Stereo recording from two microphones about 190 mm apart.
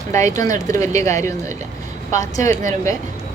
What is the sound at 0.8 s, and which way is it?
Speech, 15° left (ahead or behind).